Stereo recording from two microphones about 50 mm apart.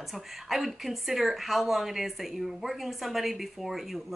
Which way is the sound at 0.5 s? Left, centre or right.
Centre.